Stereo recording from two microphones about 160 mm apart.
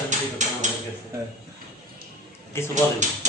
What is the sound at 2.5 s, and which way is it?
Speech, 15° left (ahead or behind).